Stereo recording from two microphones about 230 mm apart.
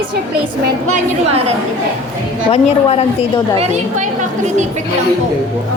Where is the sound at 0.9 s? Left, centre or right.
Right.